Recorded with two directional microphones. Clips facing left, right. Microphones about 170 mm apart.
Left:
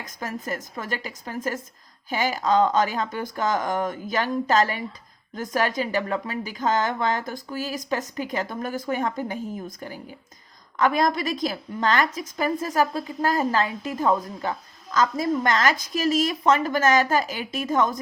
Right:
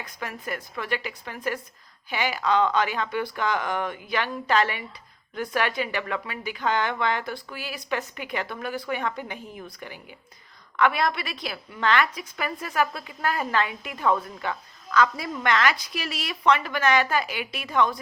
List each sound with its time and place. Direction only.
0.0 s a woman's voice: 40° left (ahead or behind)